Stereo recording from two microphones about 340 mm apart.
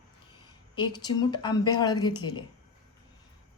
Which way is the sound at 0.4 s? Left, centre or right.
Centre.